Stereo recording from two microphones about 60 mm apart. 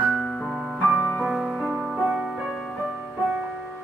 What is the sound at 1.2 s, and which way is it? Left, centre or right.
Music, centre.